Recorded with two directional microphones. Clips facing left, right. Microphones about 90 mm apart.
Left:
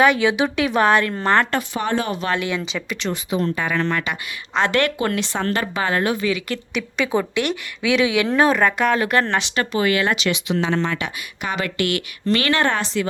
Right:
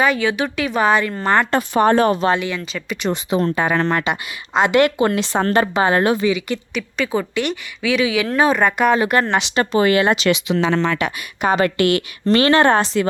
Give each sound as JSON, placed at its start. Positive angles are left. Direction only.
{"t": 0.2, "sound": "a woman's voice", "side_deg": 0}
{"t": 1.7, "sound": "speech", "side_deg": -45}
{"t": 2.4, "sound": "speech", "side_deg": 10}
{"t": 3.3, "sound": "speech", "side_deg": -40}
{"t": 4.5, "sound": "a woman's voice", "side_deg": -10}
{"t": 4.9, "sound": "speech", "side_deg": -25}
{"t": 5.3, "sound": "speech", "side_deg": -40}
{"t": 5.7, "sound": "speech", "side_deg": -25}
{"t": 6.2, "sound": "a woman's voice", "side_deg": -5}
{"t": 9.6, "sound": "speech", "side_deg": -35}
{"t": 10.2, "sound": "speech", "side_deg": -90}
{"t": 11.4, "sound": "speech", "side_deg": -40}